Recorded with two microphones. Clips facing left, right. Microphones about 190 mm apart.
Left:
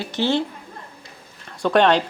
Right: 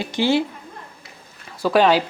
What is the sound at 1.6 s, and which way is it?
Speech, 5° right (ahead or behind).